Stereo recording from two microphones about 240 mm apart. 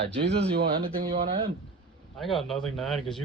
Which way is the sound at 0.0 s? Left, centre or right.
Right.